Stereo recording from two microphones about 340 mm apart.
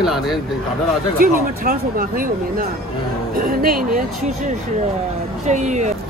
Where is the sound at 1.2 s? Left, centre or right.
Right.